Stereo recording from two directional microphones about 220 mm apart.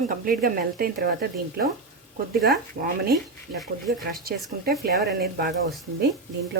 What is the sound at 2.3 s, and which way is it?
Speech, centre (ahead or behind).